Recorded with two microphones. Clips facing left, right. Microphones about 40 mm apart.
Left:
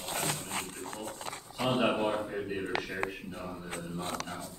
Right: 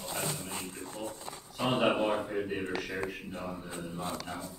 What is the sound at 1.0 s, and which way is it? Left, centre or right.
Dog, left.